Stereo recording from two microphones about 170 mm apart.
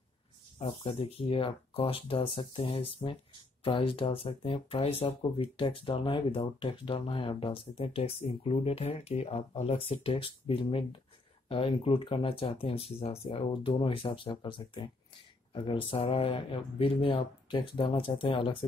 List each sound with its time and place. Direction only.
0.6 s speech: 35° left (ahead or behind)